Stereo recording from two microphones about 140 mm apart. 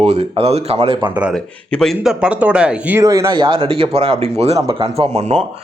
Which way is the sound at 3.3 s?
35° right (ahead or behind).